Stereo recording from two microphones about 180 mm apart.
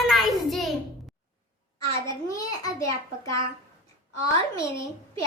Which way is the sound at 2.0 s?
20° left (ahead or behind).